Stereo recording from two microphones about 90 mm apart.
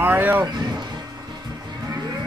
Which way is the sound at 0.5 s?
55° right (ahead or behind).